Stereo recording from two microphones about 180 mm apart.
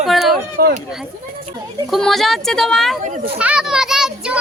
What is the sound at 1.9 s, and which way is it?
A child's voice, centre (ahead or behind).